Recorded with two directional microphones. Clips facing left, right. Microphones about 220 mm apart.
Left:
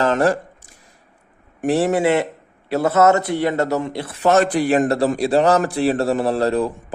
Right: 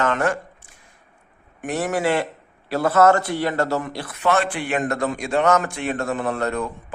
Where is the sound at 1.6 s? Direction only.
30° left (ahead or behind).